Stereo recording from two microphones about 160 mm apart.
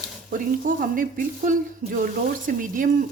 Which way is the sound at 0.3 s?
60° right (ahead or behind).